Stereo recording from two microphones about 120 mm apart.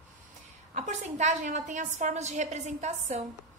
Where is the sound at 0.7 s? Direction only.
80° right.